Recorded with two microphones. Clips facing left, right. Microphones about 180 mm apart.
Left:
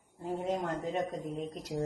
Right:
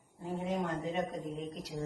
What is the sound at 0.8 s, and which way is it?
Speech, 45° left (ahead or behind).